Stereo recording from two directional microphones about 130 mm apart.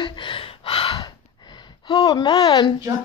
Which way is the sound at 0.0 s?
40° left (ahead or behind).